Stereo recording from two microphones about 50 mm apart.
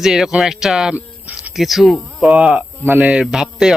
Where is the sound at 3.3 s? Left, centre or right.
Centre.